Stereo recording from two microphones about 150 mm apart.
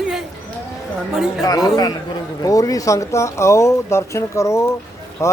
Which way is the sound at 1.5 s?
25° left (ahead or behind).